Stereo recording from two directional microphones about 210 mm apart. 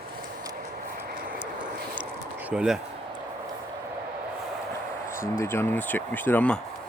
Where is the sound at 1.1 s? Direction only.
40° right (ahead or behind).